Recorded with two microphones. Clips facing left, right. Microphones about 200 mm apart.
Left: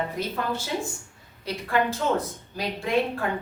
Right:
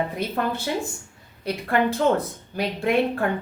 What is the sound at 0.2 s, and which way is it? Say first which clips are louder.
Speech: right 3 dB; 60° right (ahead or behind).